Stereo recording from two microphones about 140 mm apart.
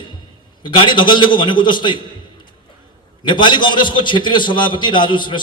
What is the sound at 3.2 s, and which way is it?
A man's voice, 35° left (ahead or behind).